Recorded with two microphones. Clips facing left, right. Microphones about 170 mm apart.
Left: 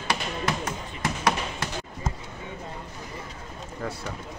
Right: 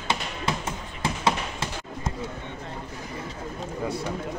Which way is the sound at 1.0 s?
25° right (ahead or behind).